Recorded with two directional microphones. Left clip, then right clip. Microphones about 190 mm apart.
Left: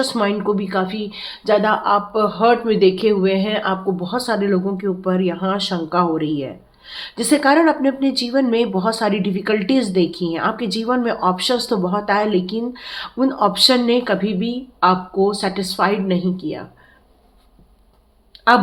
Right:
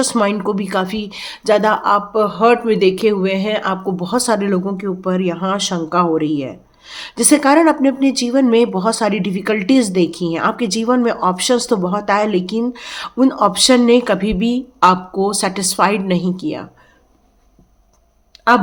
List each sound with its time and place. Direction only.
0.0 s speech: 35° right (ahead or behind)